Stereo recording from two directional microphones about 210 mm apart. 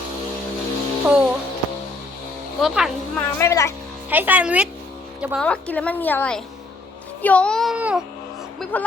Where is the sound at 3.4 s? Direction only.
15° left (ahead or behind).